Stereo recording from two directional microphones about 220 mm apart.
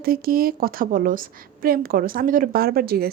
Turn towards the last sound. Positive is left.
turn(degrees=-45)  # may be behind; listen again after turning